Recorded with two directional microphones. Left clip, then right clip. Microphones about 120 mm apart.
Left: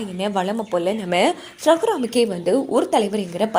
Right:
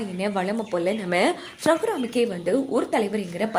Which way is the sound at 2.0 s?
75° left (ahead or behind).